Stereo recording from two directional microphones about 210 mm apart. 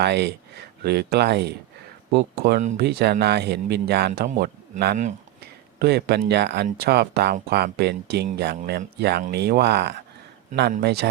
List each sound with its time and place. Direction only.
0.0 s speech: 55° right (ahead or behind)
2.6 s speech: 35° right (ahead or behind)
2.8 s speech: 50° right (ahead or behind)